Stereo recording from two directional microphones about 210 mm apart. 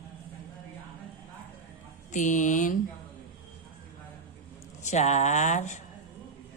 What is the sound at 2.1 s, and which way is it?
Speech, 35° left (ahead or behind).